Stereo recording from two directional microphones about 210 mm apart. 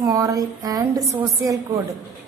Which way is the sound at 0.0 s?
20° right (ahead or behind).